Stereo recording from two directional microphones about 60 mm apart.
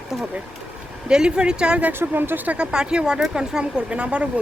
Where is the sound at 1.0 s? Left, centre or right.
Centre.